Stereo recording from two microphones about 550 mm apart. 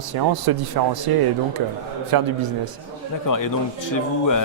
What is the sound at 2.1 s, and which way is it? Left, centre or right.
Speech, right.